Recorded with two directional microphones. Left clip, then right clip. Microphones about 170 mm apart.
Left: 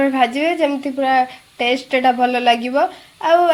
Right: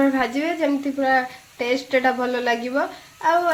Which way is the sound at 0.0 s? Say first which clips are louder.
Left 5 dB; 20° left (ahead or behind).